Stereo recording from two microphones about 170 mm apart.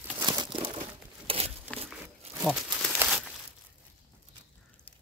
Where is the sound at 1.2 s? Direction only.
35° right (ahead or behind).